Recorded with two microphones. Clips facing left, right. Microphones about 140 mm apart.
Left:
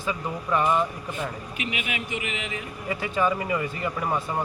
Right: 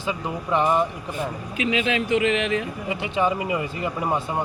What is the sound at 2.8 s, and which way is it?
A man's voice, 25° right (ahead or behind).